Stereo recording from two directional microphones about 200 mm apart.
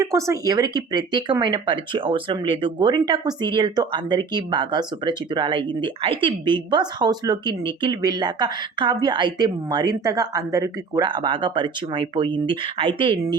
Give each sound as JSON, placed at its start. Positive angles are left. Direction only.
{"t": 0.0, "sound": "speech", "side_deg": -15}